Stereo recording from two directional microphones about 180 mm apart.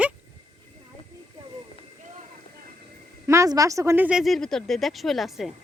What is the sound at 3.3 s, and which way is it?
A woman's voice, 15° right (ahead or behind).